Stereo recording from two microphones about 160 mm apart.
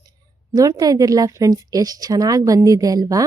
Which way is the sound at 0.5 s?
20° right (ahead or behind).